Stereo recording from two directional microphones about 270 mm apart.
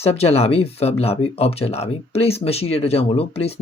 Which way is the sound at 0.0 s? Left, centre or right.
Left.